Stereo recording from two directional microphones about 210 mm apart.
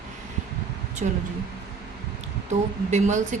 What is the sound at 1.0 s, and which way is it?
Speech, 30° right (ahead or behind).